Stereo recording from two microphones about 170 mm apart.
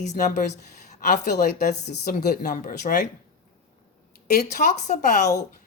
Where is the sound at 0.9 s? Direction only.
45° left (ahead or behind).